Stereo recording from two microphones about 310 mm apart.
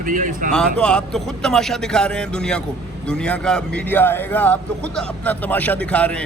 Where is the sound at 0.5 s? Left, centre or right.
Centre.